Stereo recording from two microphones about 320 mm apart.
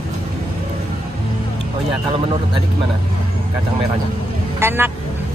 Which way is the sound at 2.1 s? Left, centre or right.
Centre.